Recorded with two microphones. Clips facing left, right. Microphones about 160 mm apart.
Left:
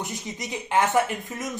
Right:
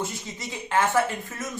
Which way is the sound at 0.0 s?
20° left (ahead or behind).